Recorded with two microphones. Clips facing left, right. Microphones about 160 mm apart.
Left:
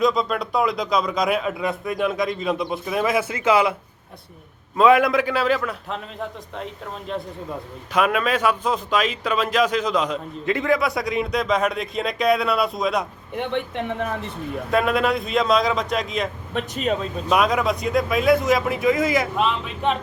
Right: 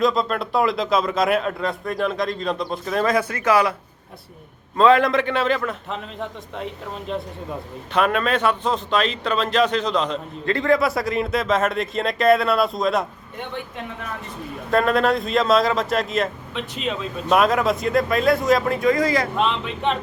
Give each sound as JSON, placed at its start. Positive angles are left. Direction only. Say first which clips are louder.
{"t": 0.0, "sound": "a man's voice", "louder": "even", "side_deg": 0}
{"t": 4.8, "sound": "a man's voice", "louder": "even", "side_deg": 10}
{"t": 14.7, "sound": "a man's voice", "louder": "right 2 dB", "side_deg": 0}
{"t": 16.5, "sound": "speech", "louder": "left 4 dB", "side_deg": 45}
{"t": 17.2, "sound": "a man's voice", "louder": "right 2 dB", "side_deg": 0}